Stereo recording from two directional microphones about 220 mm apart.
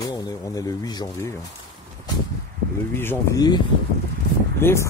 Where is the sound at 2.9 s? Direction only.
10° left (ahead or behind).